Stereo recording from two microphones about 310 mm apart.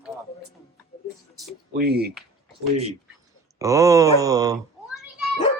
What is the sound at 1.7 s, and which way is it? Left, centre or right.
Speech, right.